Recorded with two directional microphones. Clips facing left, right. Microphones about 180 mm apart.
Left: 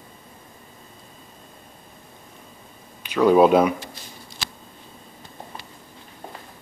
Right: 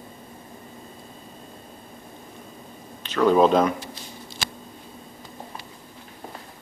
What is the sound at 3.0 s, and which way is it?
Speech, 10° left (ahead or behind).